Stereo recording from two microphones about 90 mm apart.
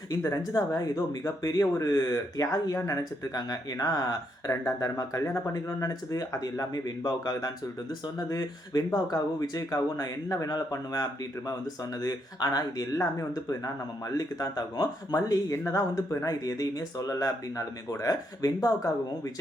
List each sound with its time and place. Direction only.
0.2 s speech: 40° left (ahead or behind)